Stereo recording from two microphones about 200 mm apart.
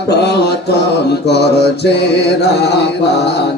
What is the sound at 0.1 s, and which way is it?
Mantra, 55° left (ahead or behind).